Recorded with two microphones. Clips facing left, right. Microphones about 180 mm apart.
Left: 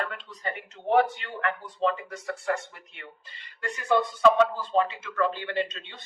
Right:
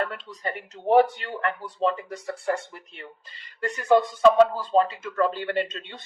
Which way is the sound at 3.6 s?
40° right (ahead or behind).